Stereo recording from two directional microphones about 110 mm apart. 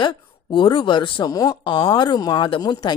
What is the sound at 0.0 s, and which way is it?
Speech, 45° left (ahead or behind).